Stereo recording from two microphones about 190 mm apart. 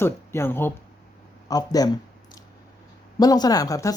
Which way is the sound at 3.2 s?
20° left (ahead or behind).